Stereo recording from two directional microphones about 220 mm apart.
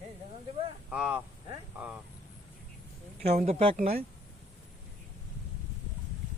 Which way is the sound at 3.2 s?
30° right (ahead or behind).